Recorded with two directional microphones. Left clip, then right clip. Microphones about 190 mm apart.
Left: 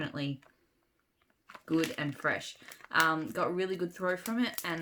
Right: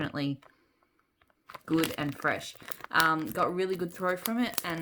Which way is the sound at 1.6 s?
45° right (ahead or behind).